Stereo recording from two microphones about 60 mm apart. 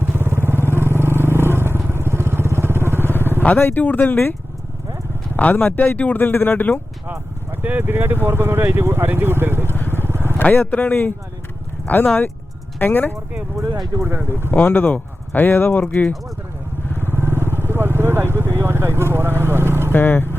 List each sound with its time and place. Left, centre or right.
0.0 s vehicle: right
3.6 s speech: left
5.4 s speech: left
7.6 s speech: right
9.9 s vehicle: right
10.3 s vehicle: left
10.8 s speech: left
13.6 s speech: right
14.1 s speech: right
14.5 s speech: left
15.8 s speech: centre
17.0 s vehicle: right
19.9 s speech: left